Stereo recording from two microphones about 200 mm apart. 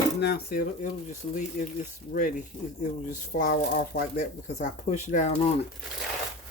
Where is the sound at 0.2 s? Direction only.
55° left (ahead or behind).